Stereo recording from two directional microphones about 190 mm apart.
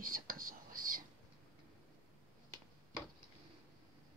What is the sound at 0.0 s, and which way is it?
Whispering, 45° right (ahead or behind).